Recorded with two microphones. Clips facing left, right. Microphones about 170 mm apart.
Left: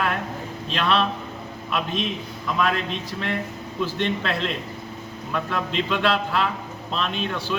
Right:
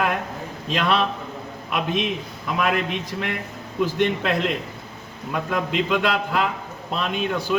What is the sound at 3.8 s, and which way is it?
Speech, 10° right (ahead or behind).